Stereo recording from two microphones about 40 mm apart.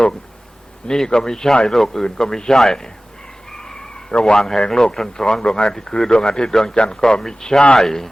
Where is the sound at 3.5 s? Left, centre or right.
Centre.